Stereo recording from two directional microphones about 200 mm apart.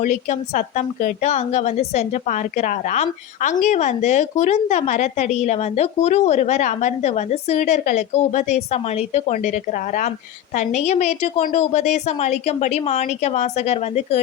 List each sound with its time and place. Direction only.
0.0 s a woman's voice: 40° left (ahead or behind)